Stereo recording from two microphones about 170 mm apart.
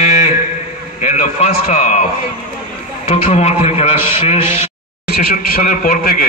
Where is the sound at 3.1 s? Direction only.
40° left (ahead or behind).